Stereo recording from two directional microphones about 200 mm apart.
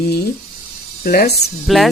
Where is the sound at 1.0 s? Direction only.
50° left (ahead or behind).